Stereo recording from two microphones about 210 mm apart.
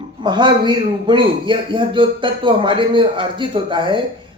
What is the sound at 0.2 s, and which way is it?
Speech, 20° right (ahead or behind).